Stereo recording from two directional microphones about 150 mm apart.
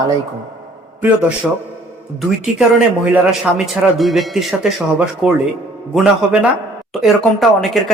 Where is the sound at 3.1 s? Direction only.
5° right (ahead or behind).